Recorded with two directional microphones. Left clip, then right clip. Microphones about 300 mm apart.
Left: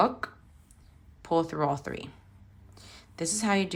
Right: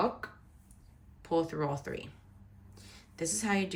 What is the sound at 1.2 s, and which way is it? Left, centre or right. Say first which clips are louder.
Speech: left 5 dB; centre.